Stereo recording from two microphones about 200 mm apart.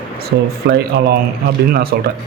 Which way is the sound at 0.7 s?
60° right (ahead or behind).